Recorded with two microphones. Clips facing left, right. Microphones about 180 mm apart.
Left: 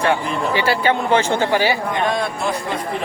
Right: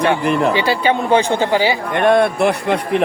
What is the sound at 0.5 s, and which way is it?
Speech, 15° right (ahead or behind).